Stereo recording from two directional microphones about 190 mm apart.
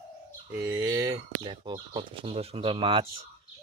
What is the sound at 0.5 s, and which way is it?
Speech, 10° right (ahead or behind).